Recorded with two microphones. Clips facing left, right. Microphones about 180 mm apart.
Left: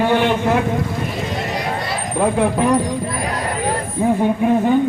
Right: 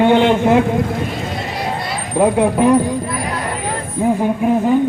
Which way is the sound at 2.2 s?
20° right (ahead or behind).